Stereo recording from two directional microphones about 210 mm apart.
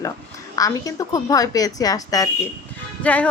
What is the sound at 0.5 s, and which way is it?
A woman's voice, 15° left (ahead or behind).